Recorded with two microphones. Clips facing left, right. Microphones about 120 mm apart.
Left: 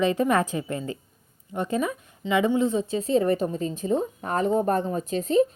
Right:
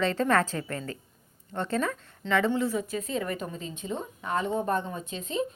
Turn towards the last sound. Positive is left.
turn(degrees=40)  # may be behind; listen again after turning